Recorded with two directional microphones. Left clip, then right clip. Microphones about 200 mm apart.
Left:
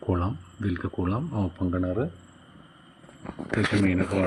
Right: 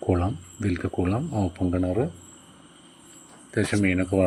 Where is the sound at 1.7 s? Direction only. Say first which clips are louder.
Right 2 dB; 30° right (ahead or behind).